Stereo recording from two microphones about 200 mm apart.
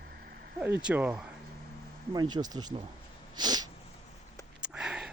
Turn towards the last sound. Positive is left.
turn(degrees=-5)  # may be behind; listen again after turning